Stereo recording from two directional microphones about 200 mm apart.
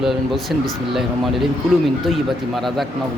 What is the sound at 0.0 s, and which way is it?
A man's voice, centre (ahead or behind).